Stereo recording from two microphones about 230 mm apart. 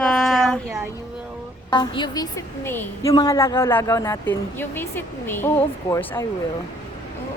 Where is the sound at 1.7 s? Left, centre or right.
Centre.